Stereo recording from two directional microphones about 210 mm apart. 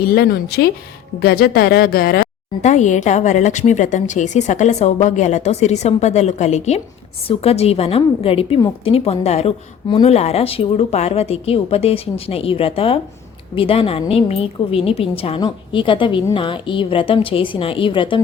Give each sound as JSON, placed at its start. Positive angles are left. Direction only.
{"t": 0.0, "sound": "a woman's voice", "side_deg": 45}